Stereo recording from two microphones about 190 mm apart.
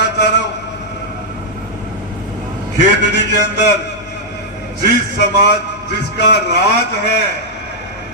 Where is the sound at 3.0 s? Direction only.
65° left (ahead or behind).